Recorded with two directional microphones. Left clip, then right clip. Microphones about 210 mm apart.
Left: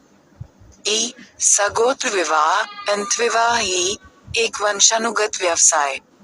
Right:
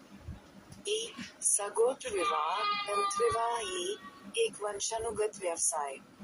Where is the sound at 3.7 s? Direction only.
15° left (ahead or behind).